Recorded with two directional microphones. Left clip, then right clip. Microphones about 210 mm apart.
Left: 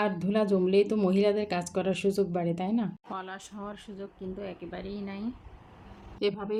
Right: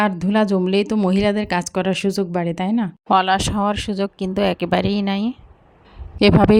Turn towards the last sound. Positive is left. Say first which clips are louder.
# right 14 dB
turn(degrees=-45)  # may be behind; listen again after turning